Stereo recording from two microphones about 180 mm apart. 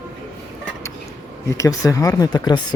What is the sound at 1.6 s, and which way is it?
Speech, 20° left (ahead or behind).